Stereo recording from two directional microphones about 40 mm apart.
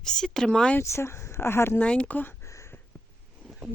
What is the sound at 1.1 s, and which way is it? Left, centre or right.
Speech, left.